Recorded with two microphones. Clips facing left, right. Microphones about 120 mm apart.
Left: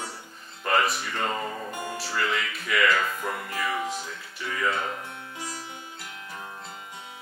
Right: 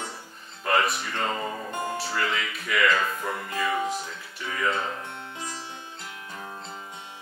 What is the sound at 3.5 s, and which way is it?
Music, 25° right (ahead or behind).